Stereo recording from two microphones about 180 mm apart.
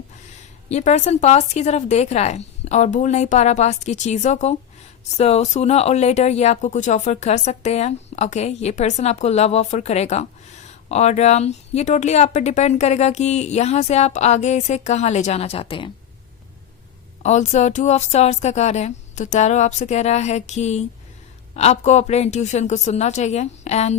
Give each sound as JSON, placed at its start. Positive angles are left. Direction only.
{"t": 0.7, "sound": "speech", "side_deg": 40}
{"t": 17.2, "sound": "speech", "side_deg": 40}